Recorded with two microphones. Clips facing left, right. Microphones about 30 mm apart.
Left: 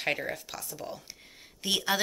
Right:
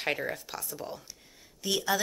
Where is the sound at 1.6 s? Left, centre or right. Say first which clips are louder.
Even; left.